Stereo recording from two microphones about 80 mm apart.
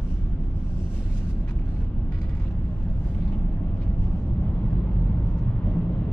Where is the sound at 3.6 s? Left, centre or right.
Centre.